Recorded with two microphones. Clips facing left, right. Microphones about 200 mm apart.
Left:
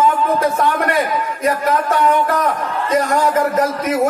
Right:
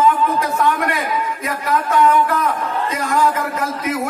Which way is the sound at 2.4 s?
40° left (ahead or behind).